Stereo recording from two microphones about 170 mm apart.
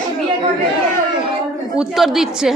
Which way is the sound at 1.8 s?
Centre (ahead or behind).